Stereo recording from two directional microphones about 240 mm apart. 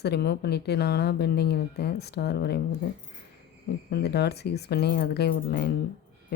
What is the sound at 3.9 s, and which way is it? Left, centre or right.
A woman's voice, left.